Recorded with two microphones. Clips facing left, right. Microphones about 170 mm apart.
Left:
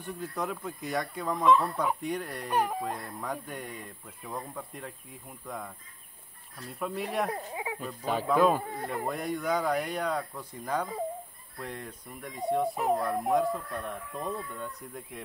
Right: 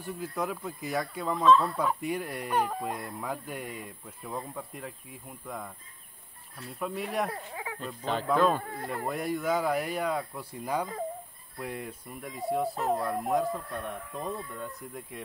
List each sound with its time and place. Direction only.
0.0 s speech: centre (ahead or behind)
1.3 s speech: 15° left (ahead or behind)
2.0 s speech: 5° right (ahead or behind)
2.5 s speech: 10° left (ahead or behind)
2.8 s speech: 10° right (ahead or behind)
6.7 s speech: centre (ahead or behind)
7.2 s speech: 20° left (ahead or behind)
8.5 s speech: 15° left (ahead or behind)
8.8 s speech: centre (ahead or behind)